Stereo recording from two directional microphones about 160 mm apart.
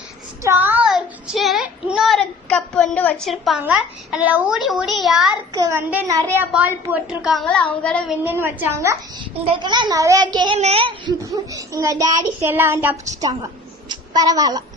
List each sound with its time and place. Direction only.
0.4 s child singing: 10° right (ahead or behind)
3.6 s a child's voice: 5° right (ahead or behind)
5.5 s child singing: 20° right (ahead or behind)
6.3 s speech: 10° right (ahead or behind)
7.4 s a sound: 5° left (ahead or behind)
8.2 s speech: 15° right (ahead or behind)
9.4 s child singing: 35° right (ahead or behind)
10.6 s a child's voice: 35° right (ahead or behind)
11.2 s child singing: 20° right (ahead or behind)
13.2 s a woman's voice: 25° right (ahead or behind)